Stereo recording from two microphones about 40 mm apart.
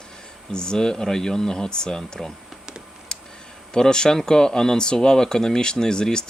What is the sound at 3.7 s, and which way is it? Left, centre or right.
Speech, centre.